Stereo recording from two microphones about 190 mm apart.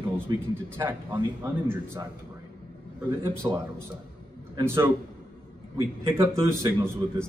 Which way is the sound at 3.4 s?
15° right (ahead or behind).